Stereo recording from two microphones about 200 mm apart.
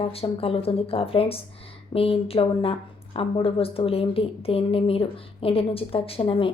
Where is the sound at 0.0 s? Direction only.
30° left (ahead or behind).